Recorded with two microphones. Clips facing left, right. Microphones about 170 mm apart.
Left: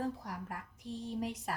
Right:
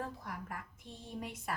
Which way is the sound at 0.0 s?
35° left (ahead or behind).